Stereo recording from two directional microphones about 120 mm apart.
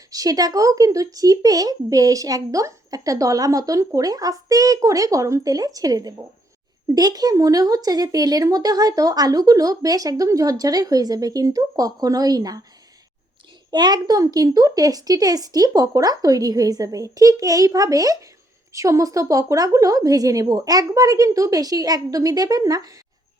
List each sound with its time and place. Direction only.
0.1 s speech: 30° right (ahead or behind)
13.7 s speech: 35° right (ahead or behind)